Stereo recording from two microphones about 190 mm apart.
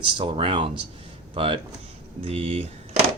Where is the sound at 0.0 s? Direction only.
25° right (ahead or behind).